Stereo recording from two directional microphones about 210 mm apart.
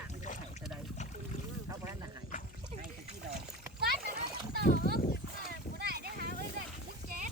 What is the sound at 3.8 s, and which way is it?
Splash, 50° right (ahead or behind).